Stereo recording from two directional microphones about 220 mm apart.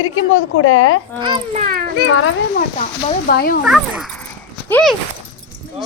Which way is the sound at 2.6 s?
40° left (ahead or behind).